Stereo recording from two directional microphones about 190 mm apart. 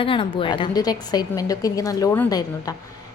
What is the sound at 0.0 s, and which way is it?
A woman's voice, 25° left (ahead or behind).